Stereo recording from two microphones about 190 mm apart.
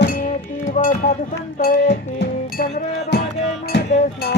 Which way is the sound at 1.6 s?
55° left (ahead or behind).